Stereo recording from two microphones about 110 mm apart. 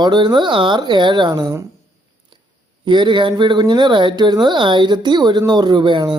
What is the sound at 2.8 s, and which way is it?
Speech, 45° right (ahead or behind).